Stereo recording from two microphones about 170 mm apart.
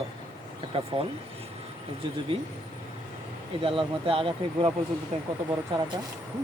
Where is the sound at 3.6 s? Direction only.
30° right (ahead or behind).